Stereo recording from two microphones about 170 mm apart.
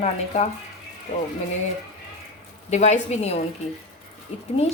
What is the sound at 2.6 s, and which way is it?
Speech, 45° left (ahead or behind).